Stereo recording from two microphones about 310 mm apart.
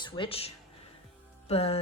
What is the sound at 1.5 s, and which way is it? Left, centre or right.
Music, centre.